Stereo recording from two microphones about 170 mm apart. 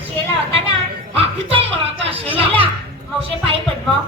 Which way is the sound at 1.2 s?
35° right (ahead or behind).